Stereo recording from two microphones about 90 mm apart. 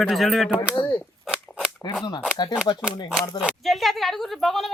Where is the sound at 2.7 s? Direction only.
55° left (ahead or behind).